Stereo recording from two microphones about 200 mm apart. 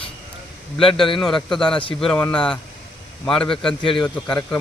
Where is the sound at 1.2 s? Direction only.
Centre (ahead or behind).